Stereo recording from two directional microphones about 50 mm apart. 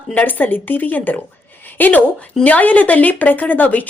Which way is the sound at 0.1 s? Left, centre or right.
Left.